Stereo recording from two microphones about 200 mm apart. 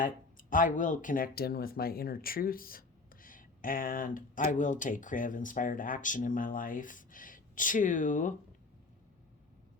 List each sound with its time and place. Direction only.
0.0 s speech: 40° left (ahead or behind)